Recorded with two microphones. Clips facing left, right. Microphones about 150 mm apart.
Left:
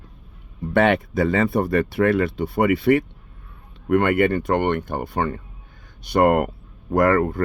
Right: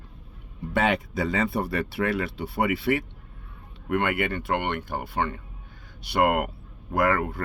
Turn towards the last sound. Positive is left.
turn(degrees=45)  # may be behind; listen again after turning